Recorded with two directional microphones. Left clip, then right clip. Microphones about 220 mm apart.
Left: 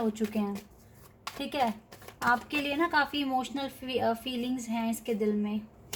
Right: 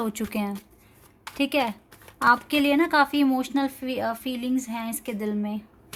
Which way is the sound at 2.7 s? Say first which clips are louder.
Right 5 dB; 50° right (ahead or behind).